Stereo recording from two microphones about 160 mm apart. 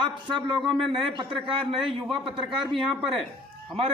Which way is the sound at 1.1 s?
35° right (ahead or behind).